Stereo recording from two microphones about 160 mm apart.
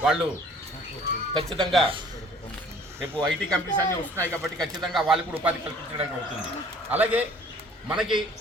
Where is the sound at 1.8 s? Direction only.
30° right (ahead or behind).